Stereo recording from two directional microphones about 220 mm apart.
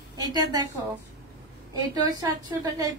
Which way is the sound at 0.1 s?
15° right (ahead or behind).